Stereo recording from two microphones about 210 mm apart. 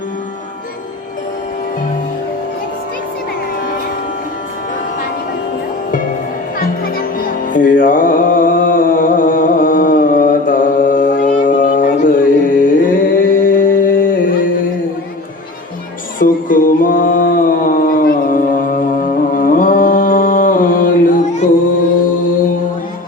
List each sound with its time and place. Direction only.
7.5 s music: 40° left (ahead or behind)
16.1 s music: 40° left (ahead or behind)